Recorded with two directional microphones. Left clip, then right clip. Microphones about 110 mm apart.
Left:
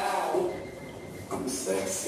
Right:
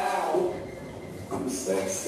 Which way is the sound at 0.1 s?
25° right (ahead or behind).